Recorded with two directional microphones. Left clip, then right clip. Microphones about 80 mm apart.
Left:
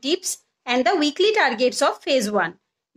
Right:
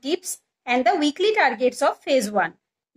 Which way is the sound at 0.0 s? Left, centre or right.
Left.